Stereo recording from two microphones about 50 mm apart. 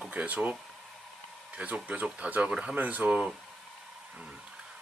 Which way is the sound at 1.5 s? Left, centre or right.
Right.